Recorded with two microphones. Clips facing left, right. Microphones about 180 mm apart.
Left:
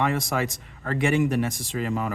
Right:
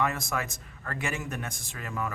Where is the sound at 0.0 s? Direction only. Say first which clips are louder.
Left 5 dB; 90° left.